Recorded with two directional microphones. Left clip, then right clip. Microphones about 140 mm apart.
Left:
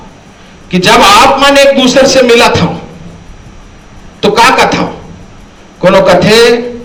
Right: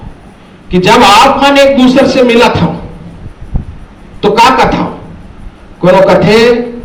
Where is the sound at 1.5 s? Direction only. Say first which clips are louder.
Left 1 dB; 35° left (ahead or behind).